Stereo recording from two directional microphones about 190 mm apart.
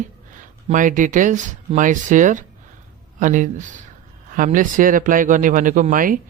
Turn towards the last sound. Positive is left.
turn(degrees=-45)  # may be behind; listen again after turning